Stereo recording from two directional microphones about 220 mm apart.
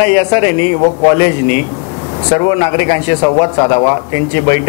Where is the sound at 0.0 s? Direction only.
10° left (ahead or behind).